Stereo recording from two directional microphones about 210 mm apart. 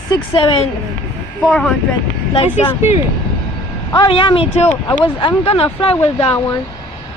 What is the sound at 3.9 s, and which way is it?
Speech, 25° left (ahead or behind).